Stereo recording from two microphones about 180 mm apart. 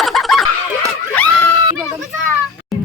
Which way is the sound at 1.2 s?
5° left (ahead or behind).